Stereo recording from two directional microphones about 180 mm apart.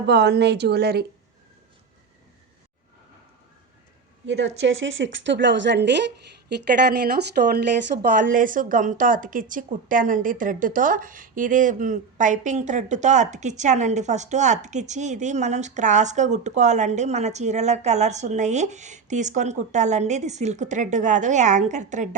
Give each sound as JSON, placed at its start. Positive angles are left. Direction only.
{"t": 0.1, "sound": "speech", "side_deg": -70}
{"t": 4.3, "sound": "a woman's voice", "side_deg": -85}
{"t": 7.9, "sound": "speech", "side_deg": -50}